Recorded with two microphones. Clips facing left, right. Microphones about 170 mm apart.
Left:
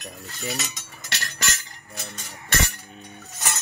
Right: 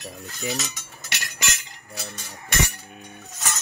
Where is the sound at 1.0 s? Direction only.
15° right (ahead or behind).